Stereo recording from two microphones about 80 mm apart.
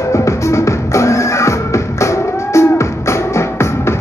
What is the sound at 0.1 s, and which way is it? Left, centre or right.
Music, left.